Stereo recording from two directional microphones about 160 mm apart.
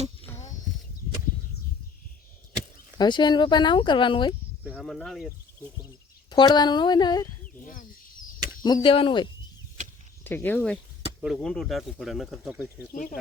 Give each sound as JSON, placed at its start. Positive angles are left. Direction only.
{"t": 3.0, "sound": "speech", "side_deg": 25}
{"t": 4.7, "sound": "speech", "side_deg": 0}
{"t": 6.3, "sound": "speech", "side_deg": 25}
{"t": 7.6, "sound": "bird", "side_deg": 55}
{"t": 8.6, "sound": "speech", "side_deg": 30}
{"t": 10.2, "sound": "speech", "side_deg": 10}
{"t": 12.9, "sound": "speech", "side_deg": 55}